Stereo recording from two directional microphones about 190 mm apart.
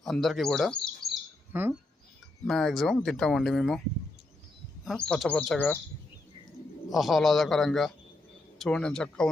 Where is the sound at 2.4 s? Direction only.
Centre (ahead or behind).